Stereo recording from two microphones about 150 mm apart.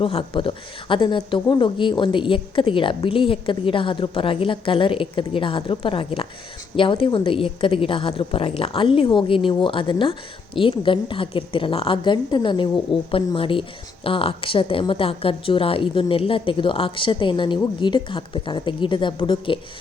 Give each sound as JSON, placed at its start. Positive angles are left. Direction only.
{"t": 0.0, "sound": "a woman's voice", "side_deg": 35}